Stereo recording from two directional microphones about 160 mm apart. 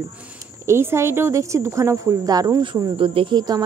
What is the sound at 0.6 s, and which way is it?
Speech, 15° right (ahead or behind).